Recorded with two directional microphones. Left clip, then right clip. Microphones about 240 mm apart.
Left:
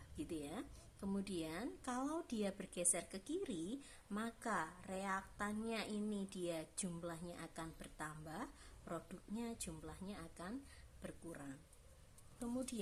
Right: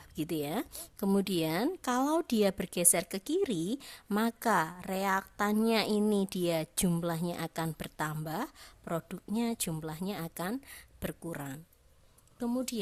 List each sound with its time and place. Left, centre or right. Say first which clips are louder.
0.2 s a woman's voice: right 13 dB; right